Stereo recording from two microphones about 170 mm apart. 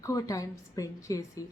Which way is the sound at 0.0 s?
20° left (ahead or behind).